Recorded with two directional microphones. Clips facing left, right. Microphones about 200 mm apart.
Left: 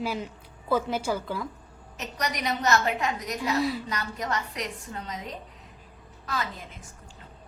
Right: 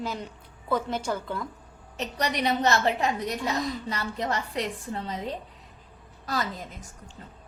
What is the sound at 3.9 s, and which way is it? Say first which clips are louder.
A woman's voice: right 1 dB; 30° right (ahead or behind).